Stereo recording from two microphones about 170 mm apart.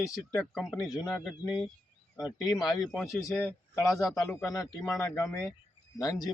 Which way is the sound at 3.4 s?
10° left (ahead or behind).